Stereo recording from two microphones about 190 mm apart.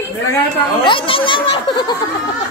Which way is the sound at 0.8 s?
25° left (ahead or behind).